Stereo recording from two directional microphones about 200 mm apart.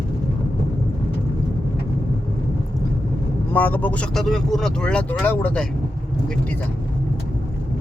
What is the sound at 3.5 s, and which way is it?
Speech, 10° left (ahead or behind).